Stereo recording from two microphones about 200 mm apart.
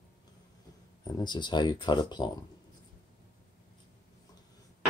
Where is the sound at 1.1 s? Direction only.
20° left (ahead or behind).